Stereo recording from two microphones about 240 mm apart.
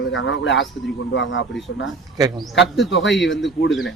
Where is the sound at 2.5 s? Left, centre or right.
Left.